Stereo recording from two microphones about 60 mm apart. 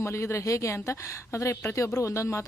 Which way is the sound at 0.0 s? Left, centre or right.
Left.